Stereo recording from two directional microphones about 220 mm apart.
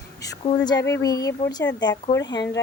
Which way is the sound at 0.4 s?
20° left (ahead or behind).